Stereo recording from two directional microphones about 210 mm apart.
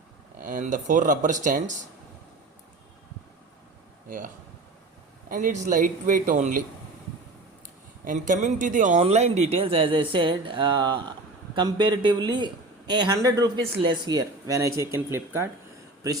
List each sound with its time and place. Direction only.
0.4 s speech: 40° right (ahead or behind)
5.3 s speech: 35° right (ahead or behind)
8.0 s speech: 35° right (ahead or behind); by 15.4 s 10° right (ahead or behind)